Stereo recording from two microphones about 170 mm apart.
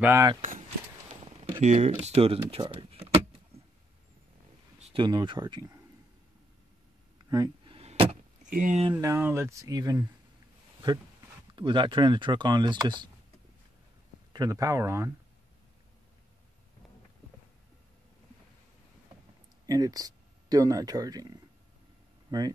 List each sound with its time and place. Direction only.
0.0 s speech: 15° right (ahead or behind)
0.4 s keys jangling: 50° right (ahead or behind)
1.2 s speech: 35° right (ahead or behind)
4.7 s speech: 35° right (ahead or behind)
7.2 s vehicle: 20° right (ahead or behind); by 8.2 s 35° right (ahead or behind)
8.5 s speech: 50° right (ahead or behind)
8.9 s speech: 15° right (ahead or behind)
11.5 s speech: 30° right (ahead or behind)
14.3 s speech: 20° right (ahead or behind)
19.6 s speech: 20° right (ahead or behind)